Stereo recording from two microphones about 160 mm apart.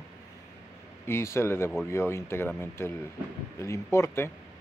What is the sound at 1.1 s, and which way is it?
Speech, 15° left (ahead or behind).